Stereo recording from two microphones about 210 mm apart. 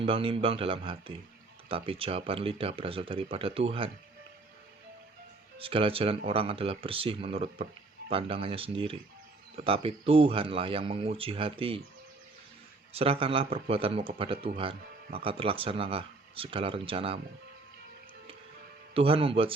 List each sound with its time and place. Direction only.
0.0 s speech: 25° right (ahead or behind)
5.5 s speech: 25° right (ahead or behind)
12.9 s speech: 25° right (ahead or behind)
18.9 s speech: 25° right (ahead or behind)